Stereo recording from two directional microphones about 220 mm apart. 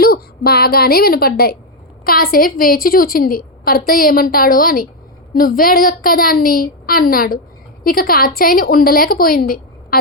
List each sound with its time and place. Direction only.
0.0 s a woman's voice: 45° left (ahead or behind)